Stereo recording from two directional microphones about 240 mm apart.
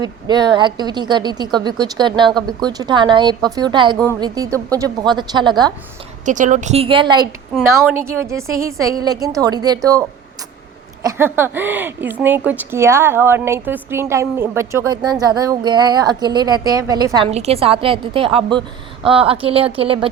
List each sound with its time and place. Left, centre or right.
0.0 s a woman's voice: centre
6.2 s a woman's voice: right; by 10.0 s centre
11.0 s a woman's voice: centre